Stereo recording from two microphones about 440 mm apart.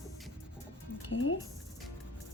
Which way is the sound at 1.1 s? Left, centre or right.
Left.